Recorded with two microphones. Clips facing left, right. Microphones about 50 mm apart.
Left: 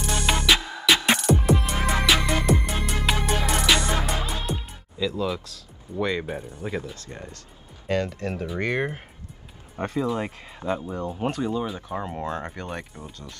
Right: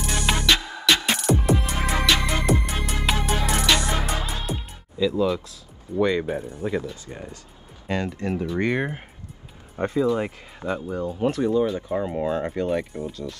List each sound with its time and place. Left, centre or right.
0.0 s music: centre
5.9 s speech: centre
9.9 s speech: centre
10.6 s speech: right
11.1 s speech: centre